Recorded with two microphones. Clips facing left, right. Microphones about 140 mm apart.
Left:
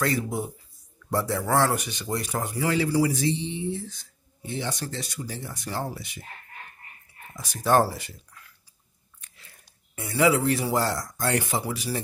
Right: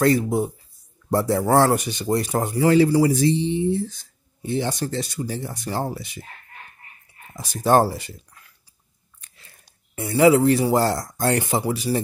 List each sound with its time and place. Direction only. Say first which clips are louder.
0.0 s speech: right 8 dB; 35° right (ahead or behind)
7.3 s speech: right 4 dB; 30° right (ahead or behind)
9.9 s speech: right 6 dB; 35° right (ahead or behind)